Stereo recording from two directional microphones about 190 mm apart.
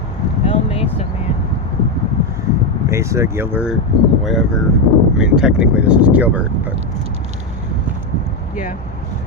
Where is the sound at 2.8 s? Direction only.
15° right (ahead or behind).